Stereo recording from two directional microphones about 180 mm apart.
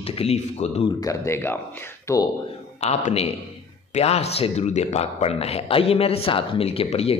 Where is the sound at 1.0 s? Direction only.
15° left (ahead or behind).